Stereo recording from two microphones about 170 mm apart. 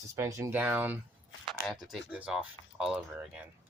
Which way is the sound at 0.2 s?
20° right (ahead or behind).